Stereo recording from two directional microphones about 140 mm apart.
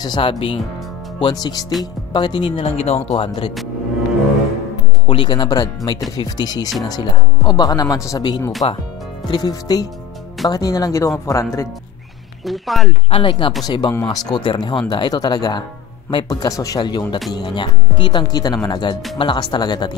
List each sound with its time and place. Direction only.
0.0 s speech: 35° left (ahead or behind)
1.2 s speech: 30° left (ahead or behind); by 3.3 s 45° left (ahead or behind)
5.0 s speech: 35° left (ahead or behind)
8.6 s speech: 45° left (ahead or behind)
9.3 s speech: 30° left (ahead or behind)
12.4 s speech: centre (ahead or behind)
13.1 s speech: 40° left (ahead or behind)